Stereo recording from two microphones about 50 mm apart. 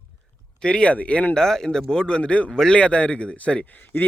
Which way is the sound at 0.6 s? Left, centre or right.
Left.